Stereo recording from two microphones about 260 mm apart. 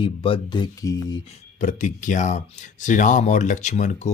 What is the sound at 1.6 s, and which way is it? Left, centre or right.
Speech, left.